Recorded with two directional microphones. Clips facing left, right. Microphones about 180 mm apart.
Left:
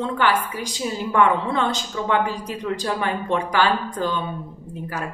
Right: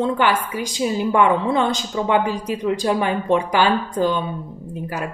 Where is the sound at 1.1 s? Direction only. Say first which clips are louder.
Right 1 dB; 15° right (ahead or behind).